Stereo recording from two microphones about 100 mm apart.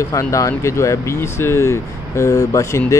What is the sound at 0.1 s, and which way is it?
Speech, 30° left (ahead or behind).